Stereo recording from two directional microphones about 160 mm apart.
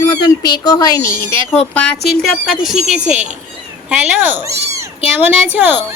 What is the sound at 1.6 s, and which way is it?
A woman's voice, 5° left (ahead or behind).